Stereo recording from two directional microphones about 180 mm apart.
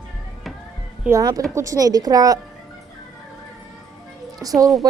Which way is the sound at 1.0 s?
20° right (ahead or behind).